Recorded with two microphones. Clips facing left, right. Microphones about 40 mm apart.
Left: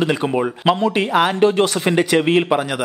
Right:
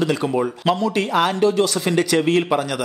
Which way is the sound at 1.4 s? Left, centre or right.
Left.